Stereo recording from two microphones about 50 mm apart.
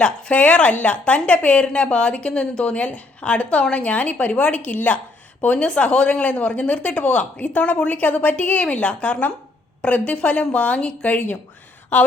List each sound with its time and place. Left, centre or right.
0.0 s a woman's voice: left